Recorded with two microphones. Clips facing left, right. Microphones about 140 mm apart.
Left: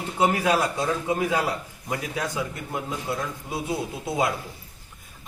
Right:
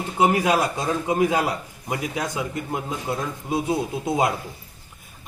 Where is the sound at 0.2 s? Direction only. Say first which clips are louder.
Right 2 dB; 15° right (ahead or behind).